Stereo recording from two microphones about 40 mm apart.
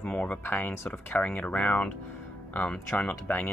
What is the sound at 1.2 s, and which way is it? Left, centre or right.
Speech, left.